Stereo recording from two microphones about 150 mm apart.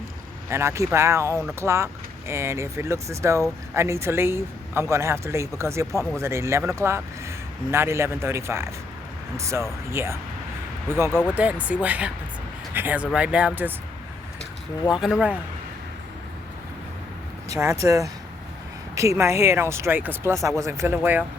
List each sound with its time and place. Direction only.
0.5 s speech: 20° right (ahead or behind)
11.1 s speech: 5° left (ahead or behind)
11.3 s speech: 10° right (ahead or behind)
14.9 s speech: 5° right (ahead or behind)
17.6 s speech: 20° right (ahead or behind)